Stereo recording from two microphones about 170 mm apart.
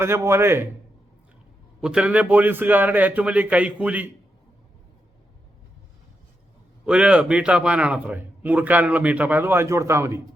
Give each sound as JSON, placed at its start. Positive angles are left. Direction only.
{"t": 0.0, "sound": "a man's voice", "side_deg": -15}
{"t": 1.8, "sound": "a man's voice", "side_deg": -5}
{"t": 6.8, "sound": "a man's voice", "side_deg": -5}